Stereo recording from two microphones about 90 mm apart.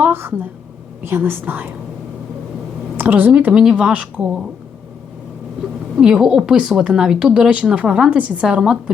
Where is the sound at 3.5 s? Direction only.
5° right (ahead or behind).